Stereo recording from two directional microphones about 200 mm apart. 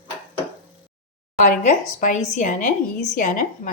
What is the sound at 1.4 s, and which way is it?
Speech, 40° left (ahead or behind).